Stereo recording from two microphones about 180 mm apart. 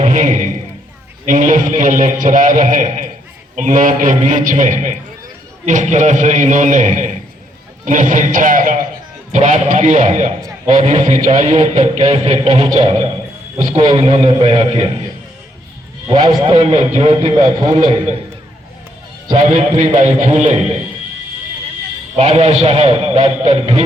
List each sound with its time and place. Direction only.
0.0 s a man's voice: 45° right (ahead or behind)
16.0 s a man's voice: 25° right (ahead or behind)
16.5 s a man's voice: 35° right (ahead or behind)
17.4 s a man's voice: 20° right (ahead or behind)
19.3 s a man's voice: 40° right (ahead or behind)
22.2 s a man's voice: 40° right (ahead or behind)